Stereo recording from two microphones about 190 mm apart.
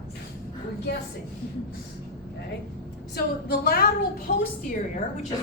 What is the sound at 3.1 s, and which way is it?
A woman's voice, 55° left (ahead or behind).